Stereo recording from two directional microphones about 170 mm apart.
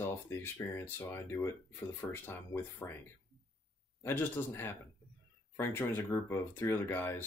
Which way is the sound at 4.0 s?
10° left (ahead or behind).